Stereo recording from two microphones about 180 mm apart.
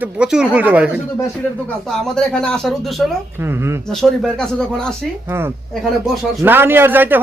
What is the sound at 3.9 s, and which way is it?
Speech, centre (ahead or behind).